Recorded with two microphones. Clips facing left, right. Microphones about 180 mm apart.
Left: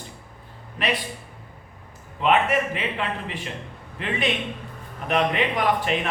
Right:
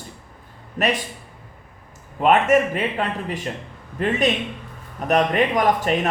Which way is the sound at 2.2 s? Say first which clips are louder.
Right 5 dB; 45° right (ahead or behind).